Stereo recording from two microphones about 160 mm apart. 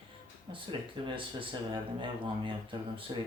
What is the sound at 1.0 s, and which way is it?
Speech, 30° right (ahead or behind).